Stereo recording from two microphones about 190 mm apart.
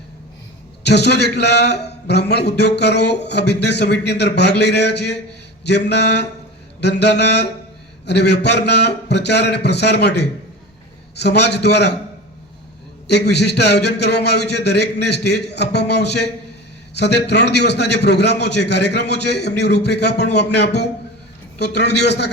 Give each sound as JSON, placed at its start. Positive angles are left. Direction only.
{"t": 0.9, "sound": "a man's voice", "side_deg": 60}
{"t": 13.1, "sound": "a man's voice", "side_deg": 60}